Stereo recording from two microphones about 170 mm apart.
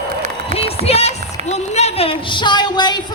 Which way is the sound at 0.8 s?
35° left (ahead or behind).